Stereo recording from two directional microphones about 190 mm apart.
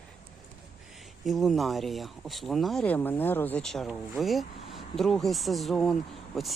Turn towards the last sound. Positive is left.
turn(degrees=0)  # may be behind; listen again after turning